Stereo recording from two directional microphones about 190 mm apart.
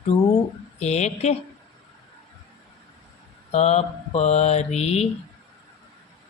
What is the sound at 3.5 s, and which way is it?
Mantra, 35° left (ahead or behind).